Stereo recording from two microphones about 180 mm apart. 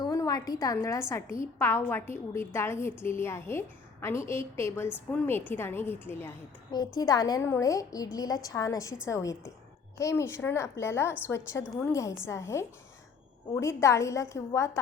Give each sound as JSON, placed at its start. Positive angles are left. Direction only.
{"t": 0.0, "sound": "a woman's voice", "side_deg": 20}